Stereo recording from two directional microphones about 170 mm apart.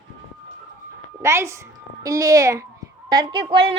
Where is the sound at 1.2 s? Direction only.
15° right (ahead or behind).